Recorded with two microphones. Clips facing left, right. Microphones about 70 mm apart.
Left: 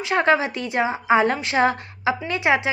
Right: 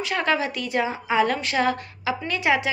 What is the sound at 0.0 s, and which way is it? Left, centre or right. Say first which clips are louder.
A woman's voice: left 4 dB; left.